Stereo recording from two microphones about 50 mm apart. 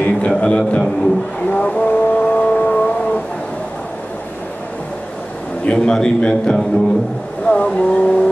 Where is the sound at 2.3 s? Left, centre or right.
Left.